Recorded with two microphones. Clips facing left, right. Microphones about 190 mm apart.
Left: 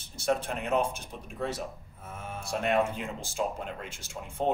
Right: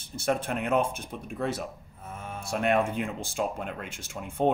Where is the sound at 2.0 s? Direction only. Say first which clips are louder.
Right 1 dB; centre (ahead or behind).